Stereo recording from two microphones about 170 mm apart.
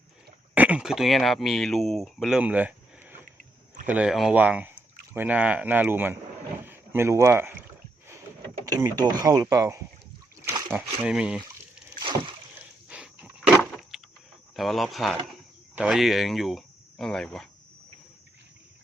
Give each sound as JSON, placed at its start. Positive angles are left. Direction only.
{"t": 0.5, "sound": "speech", "side_deg": -10}
{"t": 8.6, "sound": "a sound", "side_deg": -20}
{"t": 9.0, "sound": "speech", "side_deg": -20}
{"t": 10.8, "sound": "speech", "side_deg": -5}
{"t": 11.9, "sound": "rowboat", "side_deg": -30}
{"t": 12.9, "sound": "wild animals", "side_deg": -5}
{"t": 13.6, "sound": "a sound", "side_deg": 0}
{"t": 14.5, "sound": "speech", "side_deg": 0}